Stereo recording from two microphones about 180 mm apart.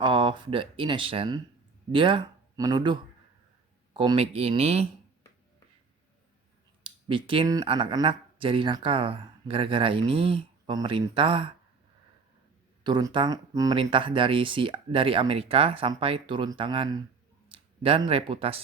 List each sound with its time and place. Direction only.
0.0 s speech: 30° right (ahead or behind)
6.8 s speech: 30° right (ahead or behind)
12.8 s speech: 25° right (ahead or behind)